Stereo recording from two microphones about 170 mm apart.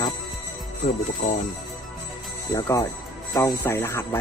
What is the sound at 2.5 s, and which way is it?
Speech, 20° left (ahead or behind).